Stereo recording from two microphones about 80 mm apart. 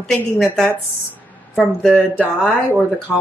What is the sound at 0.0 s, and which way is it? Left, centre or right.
A woman's voice, centre.